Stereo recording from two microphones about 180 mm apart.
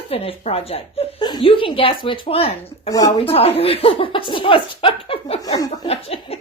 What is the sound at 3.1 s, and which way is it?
Speech, 30° left (ahead or behind).